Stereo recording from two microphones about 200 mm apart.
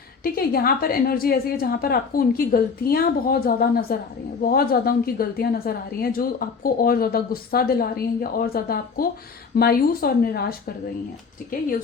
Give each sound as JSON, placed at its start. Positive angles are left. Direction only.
{"t": 0.2, "sound": "a woman's voice", "side_deg": 50}